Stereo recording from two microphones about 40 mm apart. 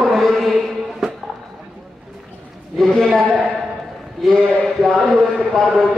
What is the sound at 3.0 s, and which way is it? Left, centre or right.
Speech, left.